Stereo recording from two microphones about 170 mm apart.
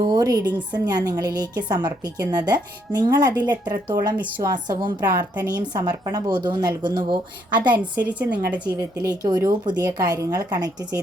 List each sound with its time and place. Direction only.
0.0 s a woman's voice: 25° right (ahead or behind)
8.0 s a woman's voice: 10° right (ahead or behind)
8.8 s a woman's voice: 20° right (ahead or behind)